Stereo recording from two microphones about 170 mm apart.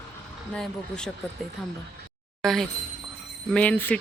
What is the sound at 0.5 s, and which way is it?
Speech, 5° left (ahead or behind).